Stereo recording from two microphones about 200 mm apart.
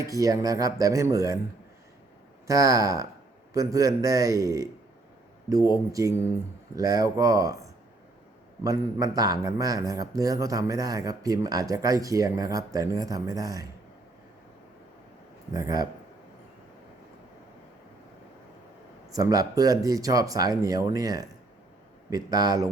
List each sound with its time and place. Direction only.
0.0 s a man's voice: 15° right (ahead or behind)
2.5 s a man's voice: 15° right (ahead or behind)
8.6 s a man's voice: 15° right (ahead or behind)
15.5 s speech: 20° right (ahead or behind)
19.1 s a man's voice: 20° right (ahead or behind)